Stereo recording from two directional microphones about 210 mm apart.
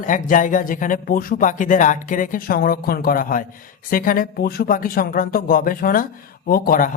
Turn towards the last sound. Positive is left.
turn(degrees=40)  # may be behind; listen again after turning